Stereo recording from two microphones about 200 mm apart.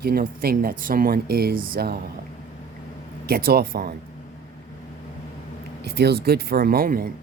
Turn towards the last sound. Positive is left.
turn(degrees=-45)  # may be behind; listen again after turning